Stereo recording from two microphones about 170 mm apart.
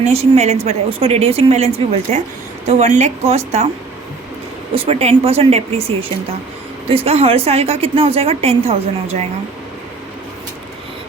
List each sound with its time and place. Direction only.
0.0 s a woman's voice: 40° right (ahead or behind)
4.7 s a woman's voice: 35° right (ahead or behind)